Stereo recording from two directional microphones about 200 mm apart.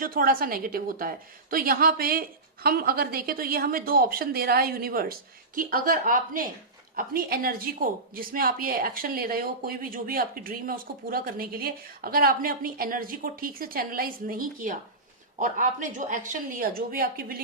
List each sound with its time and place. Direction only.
0.0 s a woman's voice: 45° right (ahead or behind)